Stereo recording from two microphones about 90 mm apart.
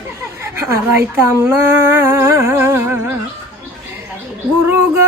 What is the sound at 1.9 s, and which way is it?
Humming, 30° right (ahead or behind).